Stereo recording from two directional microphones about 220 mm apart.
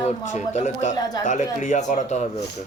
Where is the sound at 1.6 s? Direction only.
35° left (ahead or behind).